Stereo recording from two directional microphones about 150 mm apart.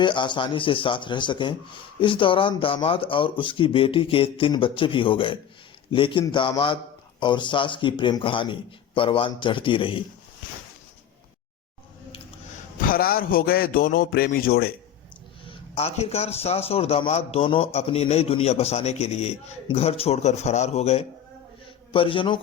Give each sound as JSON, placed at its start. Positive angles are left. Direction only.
{"t": 0.0, "sound": "a man's voice", "side_deg": 30}
{"t": 12.8, "sound": "music", "side_deg": 75}
{"t": 14.3, "sound": "music", "side_deg": 80}
{"t": 15.4, "sound": "a man's voice", "side_deg": 40}